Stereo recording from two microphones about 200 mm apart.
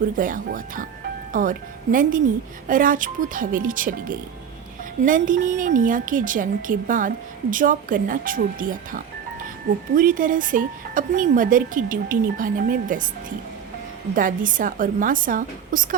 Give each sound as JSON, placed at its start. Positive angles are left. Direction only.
{"t": 0.2, "sound": "a woman's voice", "side_deg": -45}
{"t": 14.2, "sound": "speech", "side_deg": -40}